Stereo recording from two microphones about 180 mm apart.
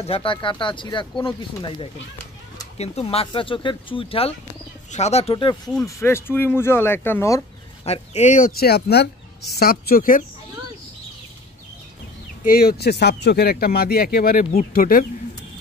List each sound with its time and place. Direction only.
0.0 s speech: 30° left (ahead or behind)
5.9 s speech: 15° left (ahead or behind)
7.8 s speech: 35° left (ahead or behind); by 10.2 s 55° left (ahead or behind)
12.4 s speech: 55° left (ahead or behind)